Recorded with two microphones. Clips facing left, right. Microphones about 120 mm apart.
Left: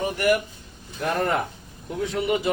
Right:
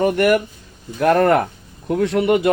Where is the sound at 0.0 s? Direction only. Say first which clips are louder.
Right 7 dB; 65° right (ahead or behind).